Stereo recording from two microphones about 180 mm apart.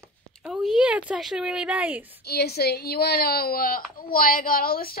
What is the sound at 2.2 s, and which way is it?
A woman's voice, 60° left (ahead or behind).